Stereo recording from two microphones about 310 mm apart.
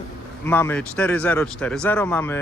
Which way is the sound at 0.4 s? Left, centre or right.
Centre.